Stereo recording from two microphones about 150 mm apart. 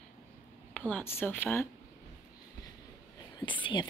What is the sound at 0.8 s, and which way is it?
Speech, 10° left (ahead or behind).